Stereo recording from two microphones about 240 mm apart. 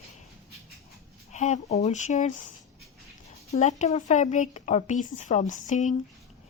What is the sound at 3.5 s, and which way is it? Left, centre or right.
A woman's voice, left.